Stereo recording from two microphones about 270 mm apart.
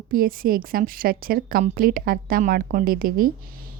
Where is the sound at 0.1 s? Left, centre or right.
Right.